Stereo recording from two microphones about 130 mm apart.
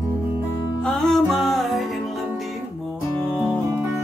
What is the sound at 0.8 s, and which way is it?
Music, 5° left (ahead or behind).